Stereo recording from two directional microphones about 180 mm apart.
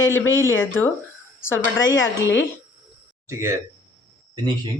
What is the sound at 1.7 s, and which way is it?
Speech, 90° left.